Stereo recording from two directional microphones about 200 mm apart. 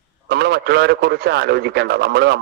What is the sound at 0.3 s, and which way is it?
A man's voice, 55° right (ahead or behind).